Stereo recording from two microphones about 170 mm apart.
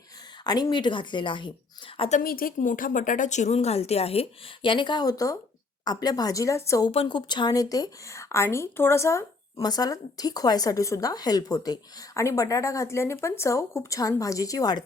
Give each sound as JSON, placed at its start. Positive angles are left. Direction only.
{"t": 0.4, "sound": "a woman's voice", "side_deg": 25}
{"t": 2.0, "sound": "a woman's voice", "side_deg": 45}
{"t": 2.2, "sound": "a woman's voice", "side_deg": 60}
{"t": 6.9, "sound": "a woman's voice", "side_deg": 30}